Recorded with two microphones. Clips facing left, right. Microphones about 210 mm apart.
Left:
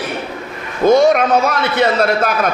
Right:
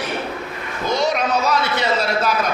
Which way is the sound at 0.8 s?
50° left (ahead or behind).